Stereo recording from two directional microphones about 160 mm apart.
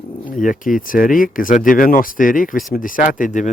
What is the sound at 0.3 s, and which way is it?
Speech, 55° left (ahead or behind).